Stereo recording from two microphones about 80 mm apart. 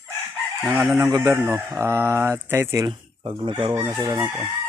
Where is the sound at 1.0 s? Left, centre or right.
Right.